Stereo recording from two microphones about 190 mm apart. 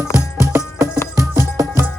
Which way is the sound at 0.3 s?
15° right (ahead or behind).